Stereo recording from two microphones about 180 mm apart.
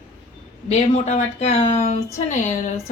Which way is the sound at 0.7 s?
40° left (ahead or behind).